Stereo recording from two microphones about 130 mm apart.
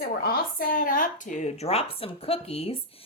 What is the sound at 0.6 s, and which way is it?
A woman's voice, 90° left.